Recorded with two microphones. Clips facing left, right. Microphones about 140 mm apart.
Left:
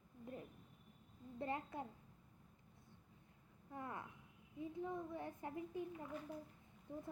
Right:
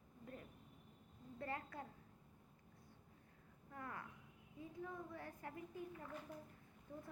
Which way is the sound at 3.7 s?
20° left (ahead or behind).